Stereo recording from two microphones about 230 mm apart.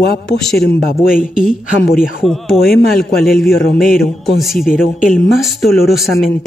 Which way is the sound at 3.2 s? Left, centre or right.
Centre.